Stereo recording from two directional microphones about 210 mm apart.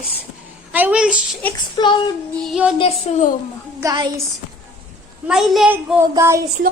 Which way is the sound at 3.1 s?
30° left (ahead or behind).